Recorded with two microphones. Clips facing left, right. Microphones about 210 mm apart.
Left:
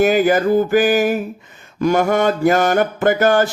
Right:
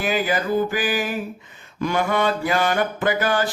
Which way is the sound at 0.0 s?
45° left (ahead or behind).